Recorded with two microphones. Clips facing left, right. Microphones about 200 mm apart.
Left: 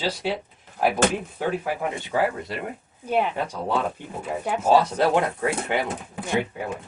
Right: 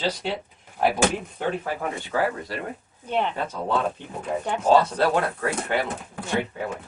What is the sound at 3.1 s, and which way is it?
Speech, 10° left (ahead or behind).